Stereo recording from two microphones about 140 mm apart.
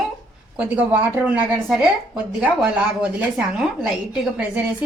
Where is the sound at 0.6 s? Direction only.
10° right (ahead or behind).